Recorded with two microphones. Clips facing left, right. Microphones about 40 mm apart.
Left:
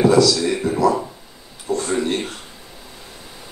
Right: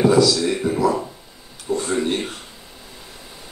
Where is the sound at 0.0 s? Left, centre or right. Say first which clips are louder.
Left 1 dB; centre.